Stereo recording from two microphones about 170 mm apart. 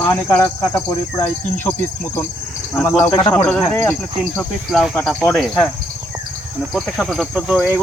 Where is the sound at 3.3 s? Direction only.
10° left (ahead or behind).